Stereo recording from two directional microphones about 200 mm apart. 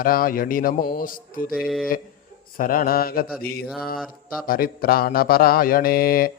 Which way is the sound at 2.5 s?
45° left (ahead or behind).